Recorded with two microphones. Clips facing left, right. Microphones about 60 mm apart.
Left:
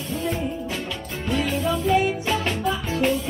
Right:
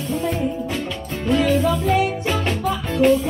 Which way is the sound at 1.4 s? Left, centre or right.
Right.